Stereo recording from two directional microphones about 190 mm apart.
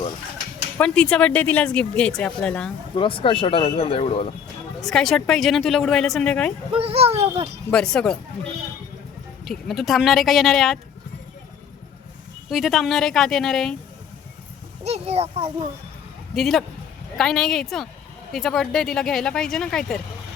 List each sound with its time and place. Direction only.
0.8 s speech: 5° left (ahead or behind)
2.9 s speech: 25° left (ahead or behind)
4.8 s speech: centre (ahead or behind)
6.7 s a child's voice: 30° right (ahead or behind)
7.7 s speech: 5° left (ahead or behind)
9.4 s speech: centre (ahead or behind)
12.5 s speech: centre (ahead or behind)
14.8 s a child's voice: 35° right (ahead or behind)
16.3 s speech: centre (ahead or behind)